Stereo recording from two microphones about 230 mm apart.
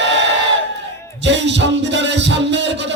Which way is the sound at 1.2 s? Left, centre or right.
Right.